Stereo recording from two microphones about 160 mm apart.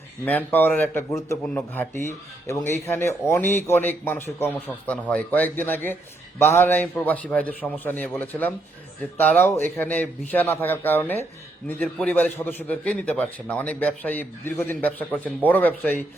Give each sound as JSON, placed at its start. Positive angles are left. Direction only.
{"t": 0.3, "sound": "a man's voice", "side_deg": 10}